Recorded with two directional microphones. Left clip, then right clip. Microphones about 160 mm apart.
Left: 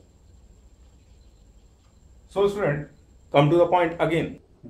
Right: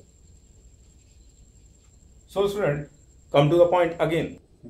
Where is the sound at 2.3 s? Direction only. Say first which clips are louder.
Left 1 dB; 5° left (ahead or behind).